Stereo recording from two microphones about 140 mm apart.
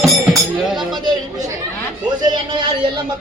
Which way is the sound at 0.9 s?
30° right (ahead or behind).